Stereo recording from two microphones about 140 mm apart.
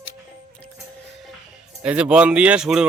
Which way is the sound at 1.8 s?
10° right (ahead or behind).